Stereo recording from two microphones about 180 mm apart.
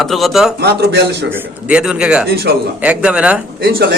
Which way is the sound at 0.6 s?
65° right (ahead or behind).